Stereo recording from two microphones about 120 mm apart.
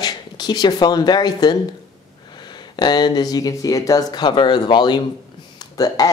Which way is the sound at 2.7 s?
35° left (ahead or behind).